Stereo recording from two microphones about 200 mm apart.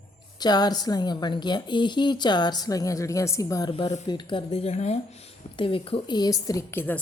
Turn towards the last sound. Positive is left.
turn(degrees=10)  # may be behind; listen again after turning